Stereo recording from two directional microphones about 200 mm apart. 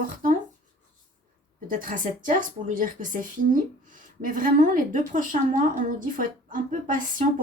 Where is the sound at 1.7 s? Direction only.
45° right (ahead or behind).